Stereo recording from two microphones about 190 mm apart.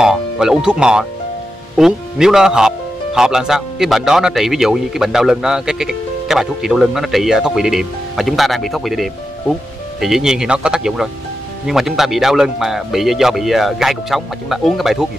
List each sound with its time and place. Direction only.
0.0 s music: 5° right (ahead or behind)
1.8 s a man's voice: 5° right (ahead or behind)